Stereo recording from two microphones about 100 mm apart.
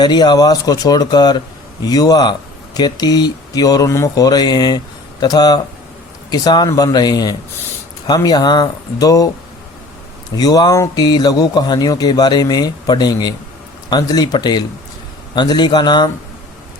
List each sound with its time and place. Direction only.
0.0 s a man's voice: 45° left (ahead or behind)
10.3 s a man's voice: 40° left (ahead or behind)